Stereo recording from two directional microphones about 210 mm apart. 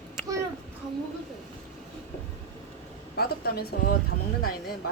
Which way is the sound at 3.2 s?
45° left (ahead or behind).